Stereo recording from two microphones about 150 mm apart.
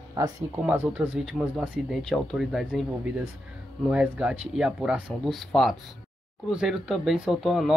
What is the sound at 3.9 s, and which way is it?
Speech, 5° right (ahead or behind).